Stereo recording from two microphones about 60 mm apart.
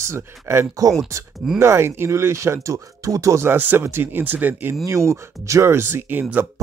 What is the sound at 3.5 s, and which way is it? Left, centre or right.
Speech, right.